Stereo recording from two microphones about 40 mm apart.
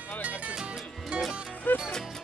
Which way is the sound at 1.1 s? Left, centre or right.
Right.